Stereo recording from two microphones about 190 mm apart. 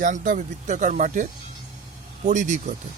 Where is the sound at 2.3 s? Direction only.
40° right (ahead or behind).